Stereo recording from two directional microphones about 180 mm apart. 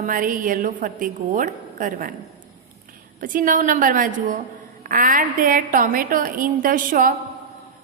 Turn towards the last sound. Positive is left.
turn(degrees=-50)  # may be behind; listen again after turning